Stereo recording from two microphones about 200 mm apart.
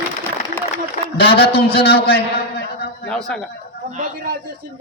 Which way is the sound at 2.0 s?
50° left (ahead or behind).